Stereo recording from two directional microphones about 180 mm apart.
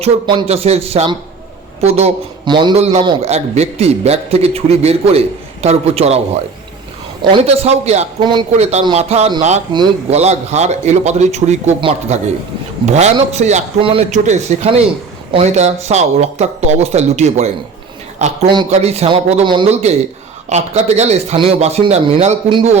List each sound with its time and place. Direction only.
0.0 s speech: 30° right (ahead or behind)
7.4 s speech: 35° right (ahead or behind)
8.2 s speech: 25° right (ahead or behind)
8.5 s speech: 35° right (ahead or behind)
10.1 s speech: 35° right (ahead or behind)